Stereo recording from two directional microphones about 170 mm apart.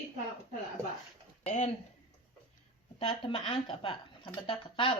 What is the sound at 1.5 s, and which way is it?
Speech, 45° left (ahead or behind).